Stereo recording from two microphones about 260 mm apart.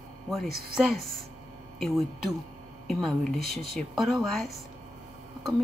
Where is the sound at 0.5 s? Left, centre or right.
Right.